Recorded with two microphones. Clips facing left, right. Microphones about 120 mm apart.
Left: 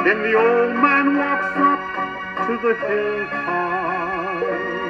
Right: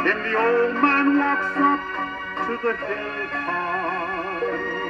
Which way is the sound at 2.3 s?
40° left (ahead or behind).